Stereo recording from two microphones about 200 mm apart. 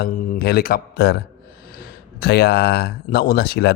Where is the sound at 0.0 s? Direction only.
50° left (ahead or behind).